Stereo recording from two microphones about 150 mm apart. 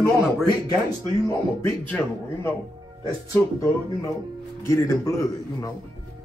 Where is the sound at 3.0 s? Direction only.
20° left (ahead or behind).